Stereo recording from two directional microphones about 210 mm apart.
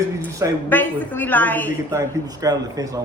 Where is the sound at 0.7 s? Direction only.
10° left (ahead or behind).